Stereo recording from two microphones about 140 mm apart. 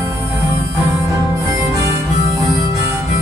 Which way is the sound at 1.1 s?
20° right (ahead or behind).